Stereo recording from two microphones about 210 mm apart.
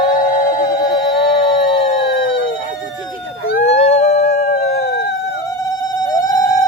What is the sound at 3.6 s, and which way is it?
Howl, 30° left (ahead or behind).